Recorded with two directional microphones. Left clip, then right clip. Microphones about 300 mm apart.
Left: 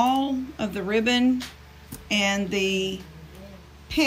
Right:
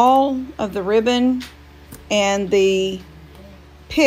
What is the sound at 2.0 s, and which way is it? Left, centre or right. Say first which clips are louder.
A woman's voice: right 7 dB; centre.